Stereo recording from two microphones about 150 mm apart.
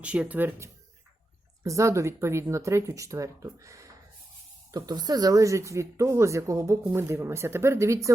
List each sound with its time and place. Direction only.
0.0 s speech: 10° right (ahead or behind)